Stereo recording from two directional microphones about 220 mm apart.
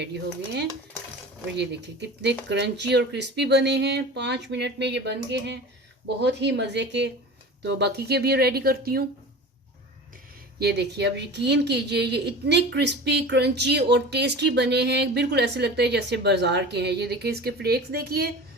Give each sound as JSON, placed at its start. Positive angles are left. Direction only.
{"t": 1.5, "sound": "speech", "side_deg": -50}
{"t": 10.6, "sound": "speech", "side_deg": -50}